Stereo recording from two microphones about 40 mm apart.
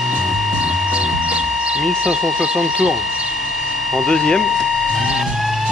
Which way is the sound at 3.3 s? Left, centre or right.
Centre.